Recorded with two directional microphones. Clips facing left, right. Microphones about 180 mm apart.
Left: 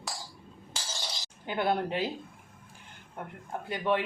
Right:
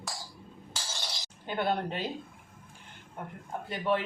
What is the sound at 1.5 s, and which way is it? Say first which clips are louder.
Speech: left 2 dB; 10° left (ahead or behind).